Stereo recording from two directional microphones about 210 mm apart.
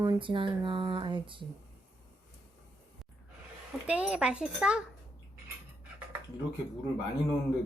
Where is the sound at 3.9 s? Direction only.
5° right (ahead or behind).